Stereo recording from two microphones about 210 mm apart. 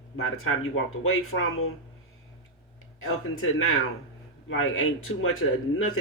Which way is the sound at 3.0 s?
75° left (ahead or behind).